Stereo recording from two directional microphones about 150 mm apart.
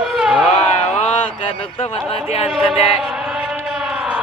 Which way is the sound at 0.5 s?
45° left (ahead or behind).